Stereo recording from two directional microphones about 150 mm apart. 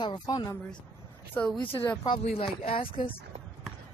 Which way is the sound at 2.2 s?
45° left (ahead or behind).